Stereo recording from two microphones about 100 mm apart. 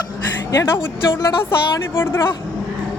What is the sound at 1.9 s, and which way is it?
Speech, 25° left (ahead or behind).